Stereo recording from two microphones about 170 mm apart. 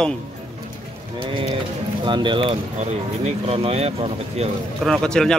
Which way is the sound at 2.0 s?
30° right (ahead or behind).